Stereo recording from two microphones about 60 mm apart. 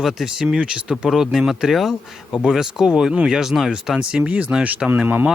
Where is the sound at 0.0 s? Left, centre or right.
Centre.